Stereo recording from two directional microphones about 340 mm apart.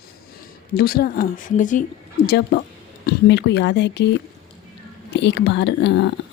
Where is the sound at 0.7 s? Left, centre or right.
Left.